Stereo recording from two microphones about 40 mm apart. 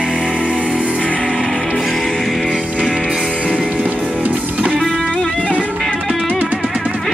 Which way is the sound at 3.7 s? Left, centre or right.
Right.